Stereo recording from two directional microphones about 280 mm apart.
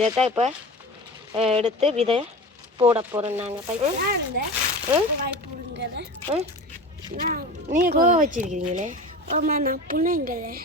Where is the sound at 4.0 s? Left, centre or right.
Right.